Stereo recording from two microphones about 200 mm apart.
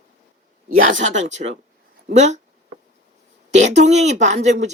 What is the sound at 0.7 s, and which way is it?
Speech, 40° right (ahead or behind).